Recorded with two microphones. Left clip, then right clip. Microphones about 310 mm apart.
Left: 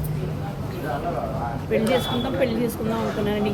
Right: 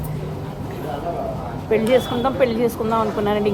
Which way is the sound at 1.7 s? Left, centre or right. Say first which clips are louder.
Right 5 dB; centre.